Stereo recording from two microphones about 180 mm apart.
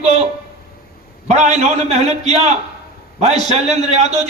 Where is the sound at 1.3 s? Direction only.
40° right (ahead or behind).